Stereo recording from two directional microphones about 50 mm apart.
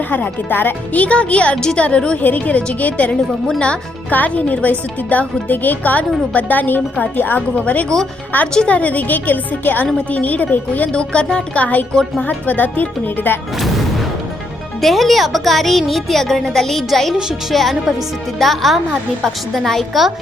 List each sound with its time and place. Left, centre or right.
0.1 s speech: left
1.0 s a woman's voice: left
10.9 s speech: centre
11.5 s speech: left
14.8 s speech: centre